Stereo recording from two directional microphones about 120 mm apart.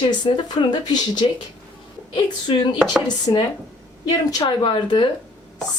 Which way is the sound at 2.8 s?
5° right (ahead or behind).